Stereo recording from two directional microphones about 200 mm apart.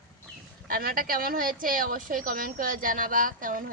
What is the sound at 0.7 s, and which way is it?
A woman's voice, 45° right (ahead or behind).